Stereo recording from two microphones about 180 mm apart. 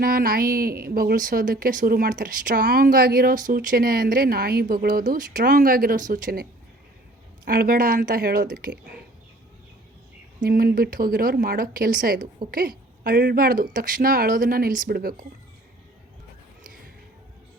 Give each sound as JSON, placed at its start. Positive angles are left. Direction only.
{"t": 0.0, "sound": "a woman's voice", "side_deg": -55}
{"t": 10.5, "sound": "a woman's voice", "side_deg": -50}